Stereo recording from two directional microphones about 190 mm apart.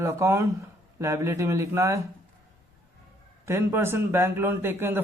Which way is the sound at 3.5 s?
15° right (ahead or behind).